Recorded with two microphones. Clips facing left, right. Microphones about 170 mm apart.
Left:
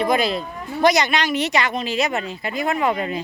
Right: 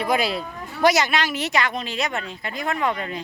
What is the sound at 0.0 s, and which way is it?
Speech, 10° right (ahead or behind).